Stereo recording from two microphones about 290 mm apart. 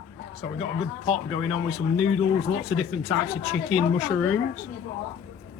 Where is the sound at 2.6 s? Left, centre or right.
Centre.